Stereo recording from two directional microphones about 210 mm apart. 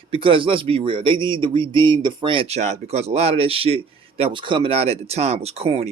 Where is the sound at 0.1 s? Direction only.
25° right (ahead or behind).